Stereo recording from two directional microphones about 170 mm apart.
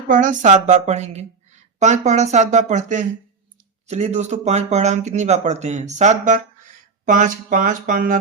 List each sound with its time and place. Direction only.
0.1 s a woman's voice: 50° right (ahead or behind)